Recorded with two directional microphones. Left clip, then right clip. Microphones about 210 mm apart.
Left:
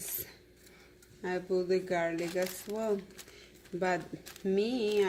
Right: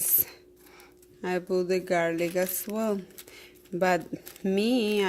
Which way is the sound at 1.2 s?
55° right (ahead or behind).